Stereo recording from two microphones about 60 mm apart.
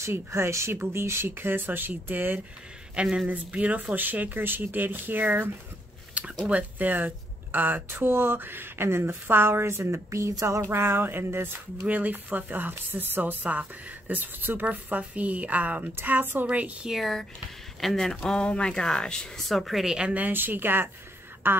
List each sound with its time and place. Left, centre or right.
0.1 s speech: right
3.0 s speech: centre
3.3 s speech: right
6.2 s a sound: right
6.5 s speech: right
10.4 s a sound: right
10.7 s speech: right
11.9 s speech: right
16.0 s speech: right
16.4 s speech: right
17.0 s speech: centre
19.4 s speech: centre
20.2 s speech: right